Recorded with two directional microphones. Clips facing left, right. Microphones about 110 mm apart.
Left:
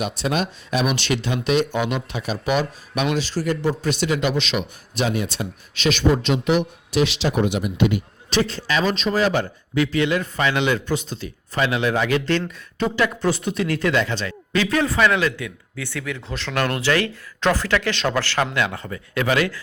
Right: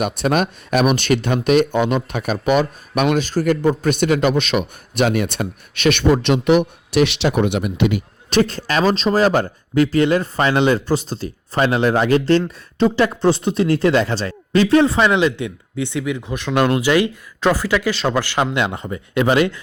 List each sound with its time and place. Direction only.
0.0 s speech: 55° right (ahead or behind); by 8.0 s 85° right
8.3 s speech: 50° right (ahead or behind); by 18.1 s 5° right (ahead or behind)
18.1 s a man's voice: 15° right (ahead or behind)
18.5 s chopping: 20° right (ahead or behind)